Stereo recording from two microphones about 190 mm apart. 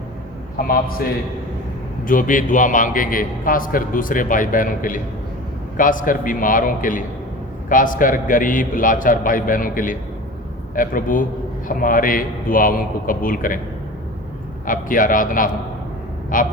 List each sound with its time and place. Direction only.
2.0 s a man's voice: 45° left (ahead or behind)
14.7 s a man's voice: 45° left (ahead or behind)